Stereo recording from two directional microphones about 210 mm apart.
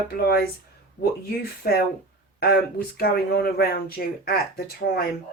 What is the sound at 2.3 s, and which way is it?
Speech, 45° left (ahead or behind).